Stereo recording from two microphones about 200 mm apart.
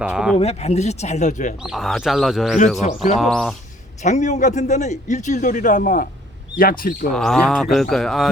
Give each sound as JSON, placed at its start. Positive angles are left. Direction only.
{"t": 0.0, "sound": "bird", "side_deg": -5}
{"t": 0.3, "sound": "a man's voice", "side_deg": 30}
{"t": 1.6, "sound": "bird", "side_deg": 0}
{"t": 4.0, "sound": "a man's voice", "side_deg": 35}
{"t": 7.1, "sound": "bird", "side_deg": 0}